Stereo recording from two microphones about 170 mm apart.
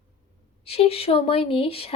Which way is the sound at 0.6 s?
35° left (ahead or behind).